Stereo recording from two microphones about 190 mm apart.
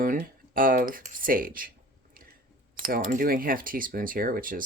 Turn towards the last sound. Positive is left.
turn(degrees=-45)  # may be behind; listen again after turning